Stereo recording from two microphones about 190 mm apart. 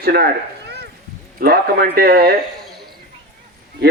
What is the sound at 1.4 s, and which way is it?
Speech, 55° right (ahead or behind).